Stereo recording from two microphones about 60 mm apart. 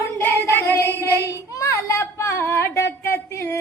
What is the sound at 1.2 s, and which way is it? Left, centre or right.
A woman's voice, left.